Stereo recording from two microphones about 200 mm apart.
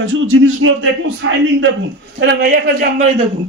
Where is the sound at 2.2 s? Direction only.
55° right (ahead or behind).